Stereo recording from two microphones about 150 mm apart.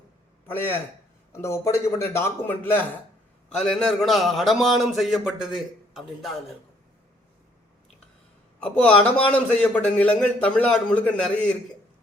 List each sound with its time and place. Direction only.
0.4 s a man's voice: 15° left (ahead or behind)
8.6 s a man's voice: 10° left (ahead or behind)